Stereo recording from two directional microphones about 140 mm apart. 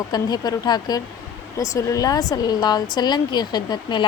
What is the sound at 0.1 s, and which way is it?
Speech, 30° left (ahead or behind).